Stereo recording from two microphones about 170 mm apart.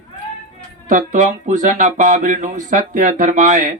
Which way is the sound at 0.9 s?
50° right (ahead or behind).